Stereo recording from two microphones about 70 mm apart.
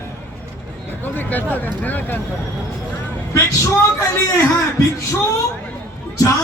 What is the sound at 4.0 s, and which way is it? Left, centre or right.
Speech, left.